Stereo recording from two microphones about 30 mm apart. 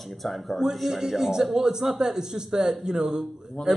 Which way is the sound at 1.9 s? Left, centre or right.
Centre.